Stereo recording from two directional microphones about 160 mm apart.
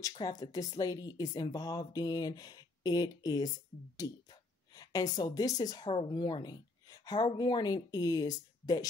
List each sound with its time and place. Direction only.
0.0 s speech: 25° left (ahead or behind)